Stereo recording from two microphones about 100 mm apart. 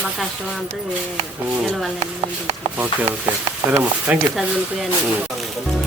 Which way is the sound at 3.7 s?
20° right (ahead or behind).